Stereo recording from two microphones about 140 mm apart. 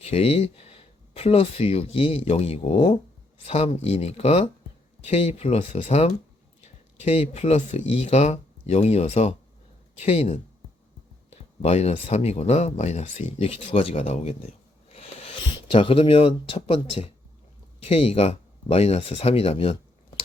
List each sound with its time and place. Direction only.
0.0 s speech: 45° left (ahead or behind)
14.9 s a sound: 45° left (ahead or behind)
15.6 s speech: 40° left (ahead or behind)